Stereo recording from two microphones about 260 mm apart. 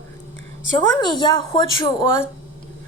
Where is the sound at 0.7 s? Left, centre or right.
Centre.